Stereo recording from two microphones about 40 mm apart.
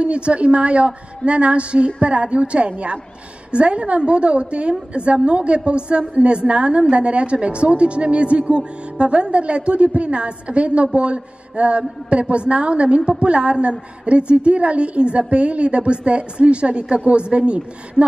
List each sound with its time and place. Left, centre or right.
0.0 s a woman's voice: right